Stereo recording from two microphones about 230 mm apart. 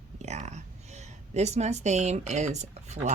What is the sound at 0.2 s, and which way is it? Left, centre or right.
A woman's voice, right.